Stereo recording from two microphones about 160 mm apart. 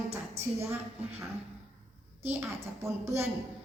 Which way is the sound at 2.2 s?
15° right (ahead or behind).